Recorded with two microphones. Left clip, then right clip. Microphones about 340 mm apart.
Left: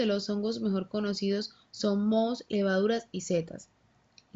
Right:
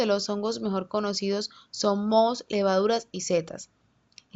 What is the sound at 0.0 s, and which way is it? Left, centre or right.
Speech, centre.